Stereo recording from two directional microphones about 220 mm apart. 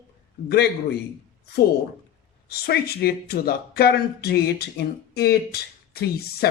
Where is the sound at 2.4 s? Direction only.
45° left (ahead or behind).